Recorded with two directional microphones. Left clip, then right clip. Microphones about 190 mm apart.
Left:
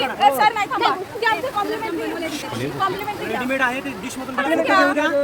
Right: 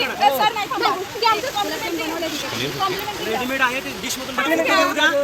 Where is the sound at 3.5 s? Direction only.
50° left (ahead or behind).